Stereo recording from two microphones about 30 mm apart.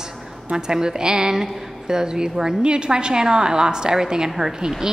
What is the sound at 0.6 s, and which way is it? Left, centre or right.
A woman's voice, right.